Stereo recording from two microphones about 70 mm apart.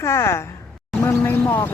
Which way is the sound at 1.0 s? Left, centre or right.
Left.